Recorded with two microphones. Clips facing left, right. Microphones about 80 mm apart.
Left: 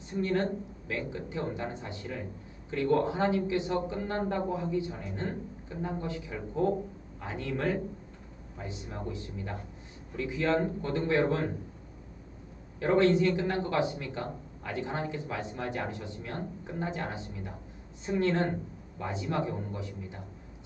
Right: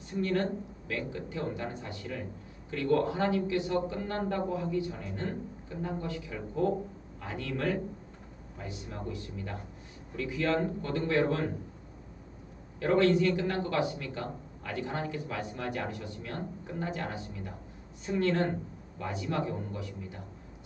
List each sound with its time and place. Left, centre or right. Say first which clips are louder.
0.1 s a man's voice: left 1 dB; left
12.8 s a man's voice: left 1 dB; left